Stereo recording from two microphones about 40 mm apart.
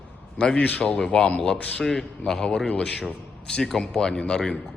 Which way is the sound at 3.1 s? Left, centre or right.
Left.